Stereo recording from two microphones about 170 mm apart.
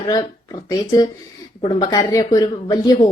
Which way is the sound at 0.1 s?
25° left (ahead or behind).